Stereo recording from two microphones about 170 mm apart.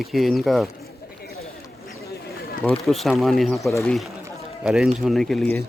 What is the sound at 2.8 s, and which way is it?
Speech, centre (ahead or behind).